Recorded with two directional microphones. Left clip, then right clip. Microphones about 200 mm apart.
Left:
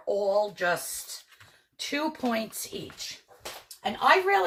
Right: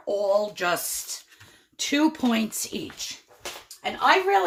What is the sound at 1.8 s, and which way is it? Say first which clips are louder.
Speech: right 6 dB; 55° right (ahead or behind).